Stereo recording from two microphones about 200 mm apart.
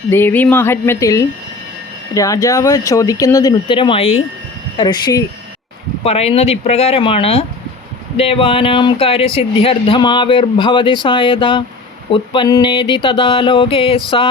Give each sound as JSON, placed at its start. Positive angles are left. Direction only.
{"t": 0.1, "sound": "speech", "side_deg": 10}